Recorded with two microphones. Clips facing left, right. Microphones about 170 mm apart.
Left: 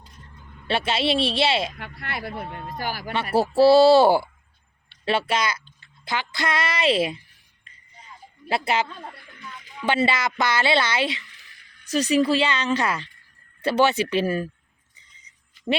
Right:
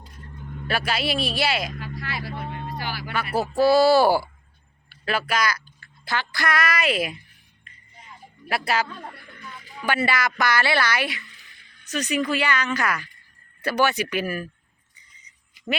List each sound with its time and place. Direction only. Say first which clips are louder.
0.7 s speech: left 3 dB; 25° left (ahead or behind)
1.8 s vehicle: even; 60° left (ahead or behind)
2.7 s speech: left 6 dB; 45° left (ahead or behind)
3.8 s speech: left 3 dB; 20° left (ahead or behind)
8.4 s speech: left 1 dB; 25° left (ahead or behind)
9.2 s a sound: even; 40° right (ahead or behind)
9.8 s speech: left 2 dB; 25° left (ahead or behind)
11.9 s speech: left 5 dB; 35° left (ahead or behind)